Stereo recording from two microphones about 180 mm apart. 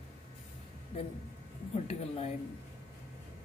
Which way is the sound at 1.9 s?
35° left (ahead or behind).